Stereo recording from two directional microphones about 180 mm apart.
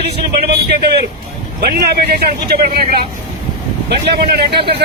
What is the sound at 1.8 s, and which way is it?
Speech, 65° right (ahead or behind).